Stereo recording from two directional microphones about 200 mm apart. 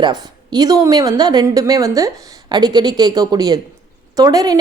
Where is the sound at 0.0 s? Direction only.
20° right (ahead or behind).